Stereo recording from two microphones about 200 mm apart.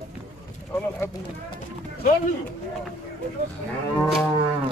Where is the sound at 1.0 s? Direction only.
20° left (ahead or behind).